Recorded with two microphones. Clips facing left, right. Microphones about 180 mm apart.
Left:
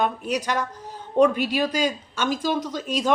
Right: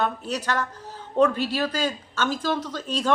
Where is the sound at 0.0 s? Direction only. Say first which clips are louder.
Left 2 dB; 10° left (ahead or behind).